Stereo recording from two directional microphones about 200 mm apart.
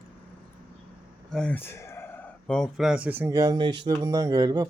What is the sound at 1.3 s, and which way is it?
Speech, 5° left (ahead or behind).